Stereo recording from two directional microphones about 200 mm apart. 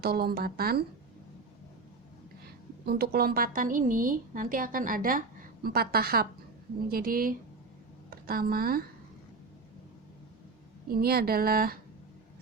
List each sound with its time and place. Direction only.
0.0 s speech: 50° right (ahead or behind)
2.4 s a woman's voice: 50° right (ahead or behind)
10.8 s speech: 50° right (ahead or behind)